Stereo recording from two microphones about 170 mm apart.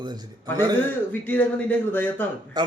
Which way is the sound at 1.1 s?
10° left (ahead or behind).